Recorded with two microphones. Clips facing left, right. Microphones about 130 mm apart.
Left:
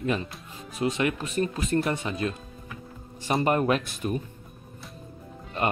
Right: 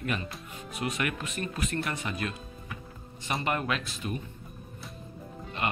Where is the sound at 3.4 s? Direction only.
40° left (ahead or behind).